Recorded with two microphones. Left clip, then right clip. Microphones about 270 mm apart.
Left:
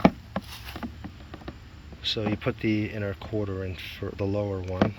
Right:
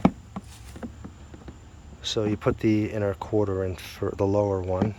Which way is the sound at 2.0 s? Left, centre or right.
Centre.